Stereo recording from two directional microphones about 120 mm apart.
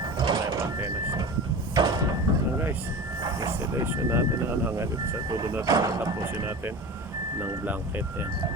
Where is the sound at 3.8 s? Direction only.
20° right (ahead or behind).